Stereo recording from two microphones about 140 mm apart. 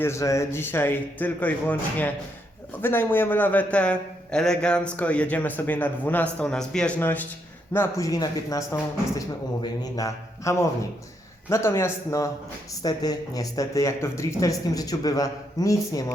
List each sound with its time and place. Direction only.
0.0 s a man's voice: 20° left (ahead or behind)